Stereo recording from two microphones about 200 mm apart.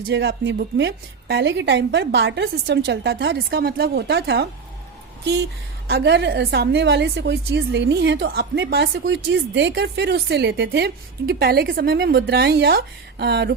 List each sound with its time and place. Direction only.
0.1 s a woman's voice: 55° right (ahead or behind)
5.9 s a woman's voice: 55° right (ahead or behind)